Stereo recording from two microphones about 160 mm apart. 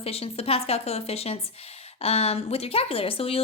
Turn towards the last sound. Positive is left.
turn(degrees=35)  # may be behind; listen again after turning